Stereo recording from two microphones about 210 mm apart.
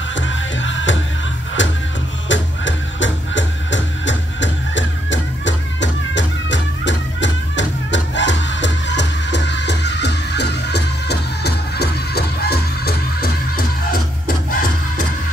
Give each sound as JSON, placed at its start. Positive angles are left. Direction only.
{"t": 0.1, "sound": "music", "side_deg": 60}